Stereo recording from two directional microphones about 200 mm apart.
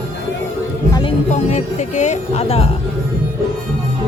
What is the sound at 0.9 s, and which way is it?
Music, 25° left (ahead or behind).